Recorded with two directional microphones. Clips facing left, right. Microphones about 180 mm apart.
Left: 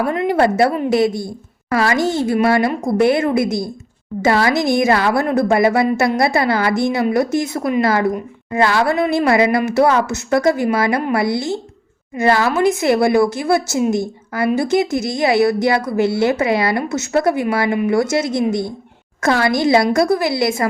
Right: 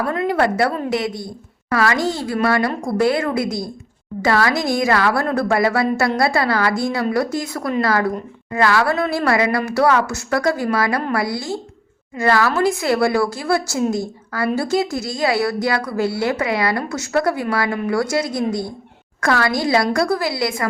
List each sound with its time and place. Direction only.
0.0 s a woman's voice: 20° left (ahead or behind)